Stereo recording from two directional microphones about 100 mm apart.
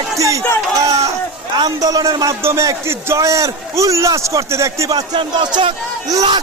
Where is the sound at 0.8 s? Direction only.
35° right (ahead or behind).